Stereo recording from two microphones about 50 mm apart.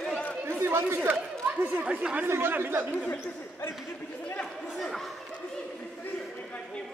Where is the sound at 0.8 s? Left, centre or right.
Right.